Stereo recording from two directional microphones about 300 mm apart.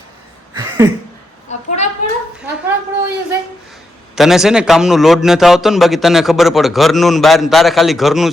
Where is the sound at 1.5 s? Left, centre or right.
Left.